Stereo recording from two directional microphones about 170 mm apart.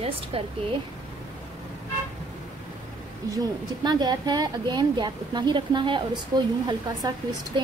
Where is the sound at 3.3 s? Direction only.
25° right (ahead or behind).